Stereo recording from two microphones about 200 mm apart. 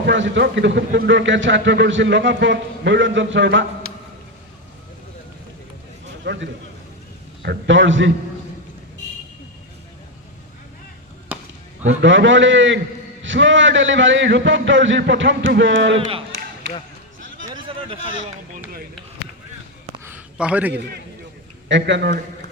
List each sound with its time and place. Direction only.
0.0 s speech: 60° right (ahead or behind)
6.2 s a man's voice: 65° right (ahead or behind)
11.3 s chop: 10° right (ahead or behind)
11.9 s a man's voice: 70° right (ahead or behind)
16.0 s speech: 25° right (ahead or behind)
17.5 s a sound: 25° right (ahead or behind)
20.1 s a sound: 5° right (ahead or behind)
21.7 s speech: 65° right (ahead or behind)